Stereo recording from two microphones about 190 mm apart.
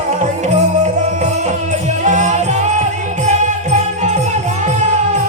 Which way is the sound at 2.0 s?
40° right (ahead or behind).